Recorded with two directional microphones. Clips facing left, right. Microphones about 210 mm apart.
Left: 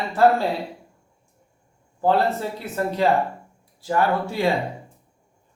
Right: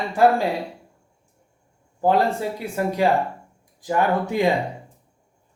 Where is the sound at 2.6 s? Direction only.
10° right (ahead or behind).